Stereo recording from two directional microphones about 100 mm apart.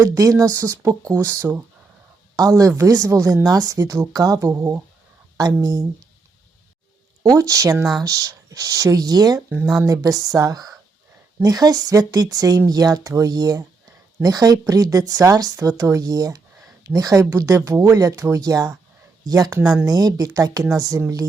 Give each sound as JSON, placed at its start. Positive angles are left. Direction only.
{"t": 0.0, "sound": "a woman's voice", "side_deg": -35}
{"t": 7.2, "sound": "a woman's voice", "side_deg": -35}